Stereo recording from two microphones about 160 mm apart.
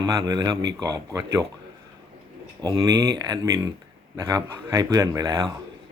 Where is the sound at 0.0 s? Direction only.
25° right (ahead or behind).